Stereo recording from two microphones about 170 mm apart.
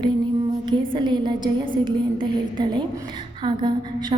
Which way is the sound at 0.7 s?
25° right (ahead or behind).